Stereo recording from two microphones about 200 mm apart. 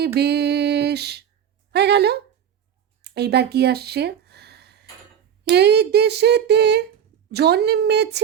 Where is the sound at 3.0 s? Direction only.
55° right (ahead or behind).